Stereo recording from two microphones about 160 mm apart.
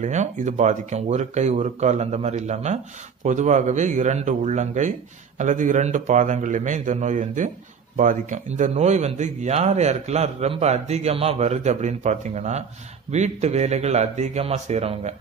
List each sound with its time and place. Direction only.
0.0 s a man's voice: 45° right (ahead or behind)